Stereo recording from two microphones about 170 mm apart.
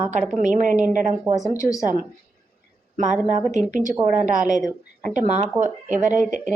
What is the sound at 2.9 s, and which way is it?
A woman's voice, 45° right (ahead or behind).